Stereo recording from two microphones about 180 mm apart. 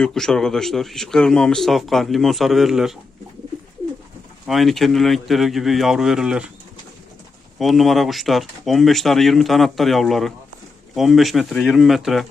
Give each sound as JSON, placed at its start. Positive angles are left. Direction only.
{"t": 0.0, "sound": "a man's voice", "side_deg": 0}
{"t": 4.4, "sound": "a man's voice", "side_deg": 0}
{"t": 7.6, "sound": "a man's voice", "side_deg": 0}